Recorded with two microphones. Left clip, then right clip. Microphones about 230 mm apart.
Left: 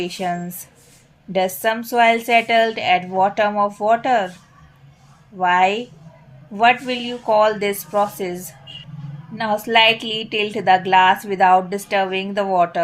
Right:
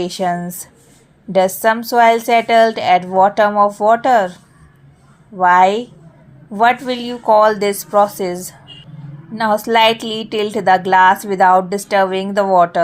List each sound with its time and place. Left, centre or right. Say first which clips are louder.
0.0 s a woman's voice: right 5 dB; right
5.4 s a woman's voice: right 5 dB; right